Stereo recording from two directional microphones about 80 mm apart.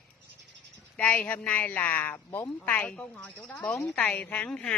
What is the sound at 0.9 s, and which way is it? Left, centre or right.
A woman's voice, centre.